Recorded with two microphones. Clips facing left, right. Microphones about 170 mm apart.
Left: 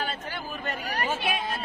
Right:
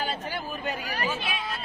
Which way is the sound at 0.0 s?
5° right (ahead or behind).